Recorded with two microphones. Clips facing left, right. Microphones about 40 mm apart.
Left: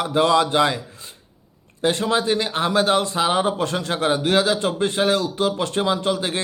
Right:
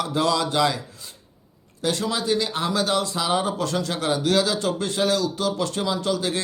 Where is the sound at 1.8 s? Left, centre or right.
Left.